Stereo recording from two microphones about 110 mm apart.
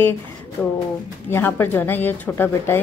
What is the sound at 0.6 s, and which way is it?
A woman's voice, 15° left (ahead or behind).